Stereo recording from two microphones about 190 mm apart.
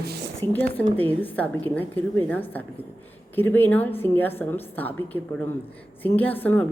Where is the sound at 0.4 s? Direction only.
10° left (ahead or behind).